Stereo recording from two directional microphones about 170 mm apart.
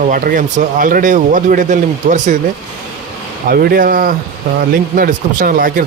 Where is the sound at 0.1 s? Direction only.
55° right (ahead or behind).